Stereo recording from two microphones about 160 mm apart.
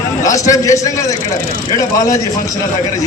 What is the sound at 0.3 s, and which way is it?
Speech, 20° left (ahead or behind).